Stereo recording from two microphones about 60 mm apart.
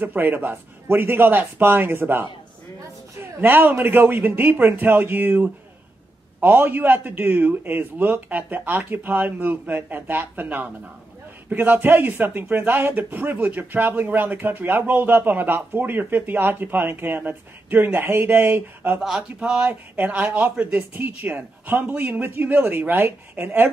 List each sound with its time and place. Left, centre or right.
0.0 s speech: right
18.9 s speech: centre
19.7 s speech: right